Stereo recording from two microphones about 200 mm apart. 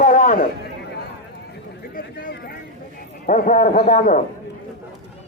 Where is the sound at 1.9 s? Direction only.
50° left (ahead or behind).